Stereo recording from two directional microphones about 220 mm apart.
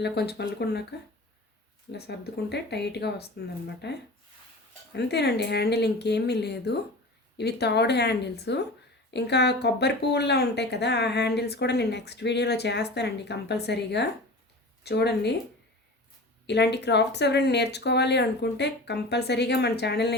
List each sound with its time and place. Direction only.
0.0 s speech: 50° left (ahead or behind)
16.5 s speech: 50° left (ahead or behind)